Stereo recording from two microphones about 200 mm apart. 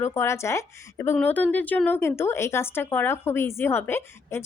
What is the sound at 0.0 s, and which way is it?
A woman's voice, 15° left (ahead or behind).